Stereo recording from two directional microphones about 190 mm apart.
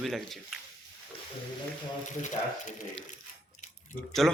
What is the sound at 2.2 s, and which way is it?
Speech, 40° left (ahead or behind).